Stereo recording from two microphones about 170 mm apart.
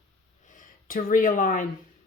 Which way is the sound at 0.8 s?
55° left (ahead or behind).